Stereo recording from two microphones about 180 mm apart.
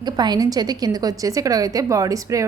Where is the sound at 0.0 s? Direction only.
25° right (ahead or behind).